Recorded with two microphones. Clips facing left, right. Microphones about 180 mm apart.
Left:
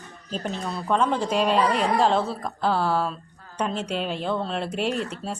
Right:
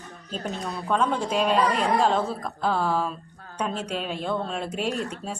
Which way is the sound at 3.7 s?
45° right (ahead or behind).